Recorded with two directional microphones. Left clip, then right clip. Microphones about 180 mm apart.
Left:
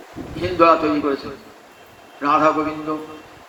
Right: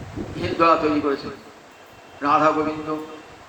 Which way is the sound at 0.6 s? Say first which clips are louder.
Left 3 dB; 35° left (ahead or behind).